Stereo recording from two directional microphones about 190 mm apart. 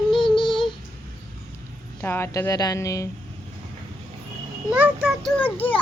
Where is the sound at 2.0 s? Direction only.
15° left (ahead or behind).